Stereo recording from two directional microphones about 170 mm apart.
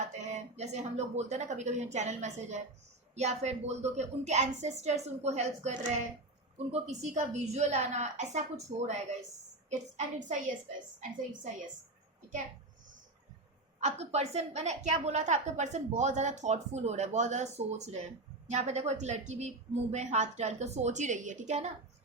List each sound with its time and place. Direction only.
0.1 s a woman's voice: 40° right (ahead or behind)
10.2 s a woman's voice: 50° right (ahead or behind)
13.7 s a woman's voice: 40° right (ahead or behind)